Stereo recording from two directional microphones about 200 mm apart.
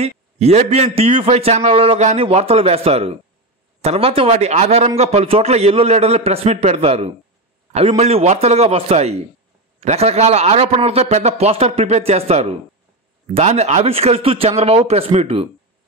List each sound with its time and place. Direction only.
0.0 s a man's voice: 30° right (ahead or behind)